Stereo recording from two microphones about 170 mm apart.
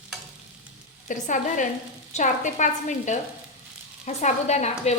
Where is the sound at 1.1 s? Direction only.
50° left (ahead or behind).